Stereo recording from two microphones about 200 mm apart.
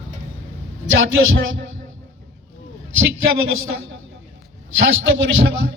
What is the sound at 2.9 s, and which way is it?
A man's voice, 80° right.